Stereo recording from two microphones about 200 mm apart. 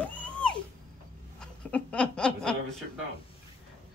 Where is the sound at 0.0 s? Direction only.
5° left (ahead or behind).